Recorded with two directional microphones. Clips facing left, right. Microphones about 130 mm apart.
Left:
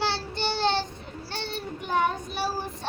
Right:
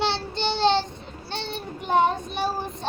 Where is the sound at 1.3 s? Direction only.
20° right (ahead or behind).